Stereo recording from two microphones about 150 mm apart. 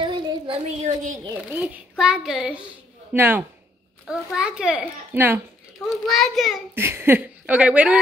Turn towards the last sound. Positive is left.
turn(degrees=-10)  # may be behind; listen again after turning